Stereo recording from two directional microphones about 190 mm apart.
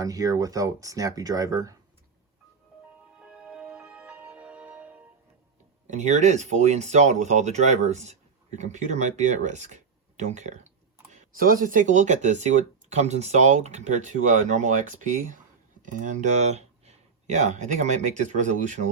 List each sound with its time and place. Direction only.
0.0 s speech: 20° right (ahead or behind)
3.2 s music: 5° right (ahead or behind)
5.9 s speech: 40° right (ahead or behind)